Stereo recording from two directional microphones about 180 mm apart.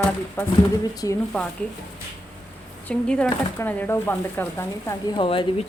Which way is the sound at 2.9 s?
5° left (ahead or behind).